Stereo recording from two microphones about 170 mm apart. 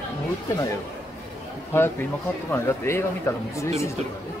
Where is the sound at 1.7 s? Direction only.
15° left (ahead or behind).